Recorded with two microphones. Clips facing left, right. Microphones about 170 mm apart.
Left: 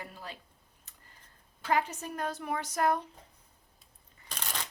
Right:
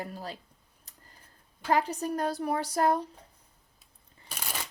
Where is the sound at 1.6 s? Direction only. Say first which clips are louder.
Right 3 dB; 35° right (ahead or behind).